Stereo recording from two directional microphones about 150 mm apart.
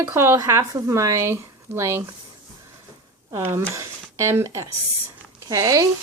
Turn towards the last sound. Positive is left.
turn(degrees=-20)  # may be behind; listen again after turning